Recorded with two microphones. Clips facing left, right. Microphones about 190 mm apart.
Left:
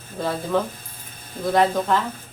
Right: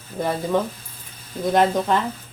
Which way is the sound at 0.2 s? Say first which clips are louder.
Right 1 dB; 15° right (ahead or behind).